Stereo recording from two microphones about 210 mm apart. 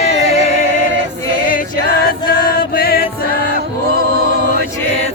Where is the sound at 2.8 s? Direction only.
45° left (ahead or behind).